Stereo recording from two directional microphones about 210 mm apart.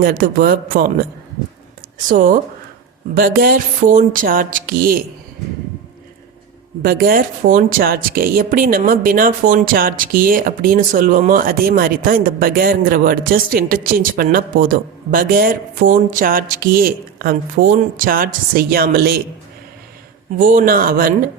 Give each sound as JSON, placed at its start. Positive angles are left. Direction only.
{"t": 0.0, "sound": "a woman's voice", "side_deg": -45}
{"t": 2.0, "sound": "speech", "side_deg": -40}
{"t": 6.8, "sound": "a woman's voice", "side_deg": -45}
{"t": 20.4, "sound": "a woman's voice", "side_deg": -40}